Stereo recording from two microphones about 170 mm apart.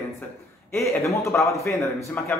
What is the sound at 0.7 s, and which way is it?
A man's voice, 15° left (ahead or behind).